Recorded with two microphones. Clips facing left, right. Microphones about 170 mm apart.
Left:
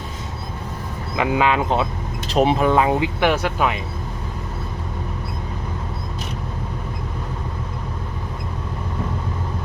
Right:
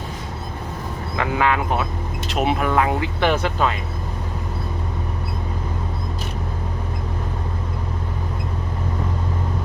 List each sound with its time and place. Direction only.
1.1 s speech: 15° left (ahead or behind)
3.2 s speech: 10° left (ahead or behind)